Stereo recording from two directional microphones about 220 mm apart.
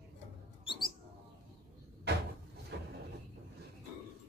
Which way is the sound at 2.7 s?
50° right (ahead or behind).